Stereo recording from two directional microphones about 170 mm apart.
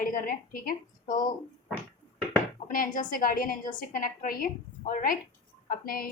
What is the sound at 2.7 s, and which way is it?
A woman's voice, 55° left (ahead or behind).